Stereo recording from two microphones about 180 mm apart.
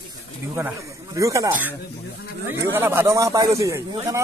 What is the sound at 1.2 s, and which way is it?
Speech, 15° right (ahead or behind).